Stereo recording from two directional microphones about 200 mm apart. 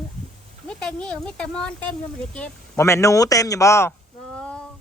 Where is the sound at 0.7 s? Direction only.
5° left (ahead or behind).